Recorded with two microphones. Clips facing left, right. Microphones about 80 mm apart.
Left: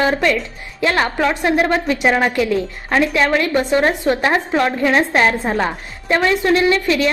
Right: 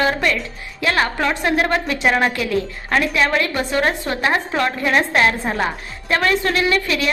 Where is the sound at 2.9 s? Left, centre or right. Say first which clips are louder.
Left 3 dB; left.